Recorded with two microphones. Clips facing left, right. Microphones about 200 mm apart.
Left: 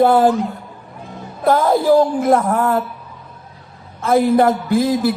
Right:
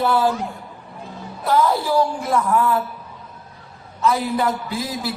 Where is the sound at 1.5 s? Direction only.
50° left (ahead or behind).